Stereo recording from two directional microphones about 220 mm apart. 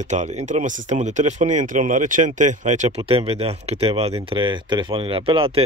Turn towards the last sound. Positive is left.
turn(degrees=-25)  # may be behind; listen again after turning